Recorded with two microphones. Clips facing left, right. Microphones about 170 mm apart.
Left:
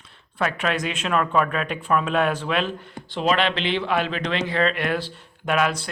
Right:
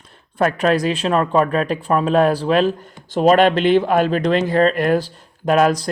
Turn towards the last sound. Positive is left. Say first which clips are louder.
# right 7 dB
turn(degrees=-40)  # may be behind; listen again after turning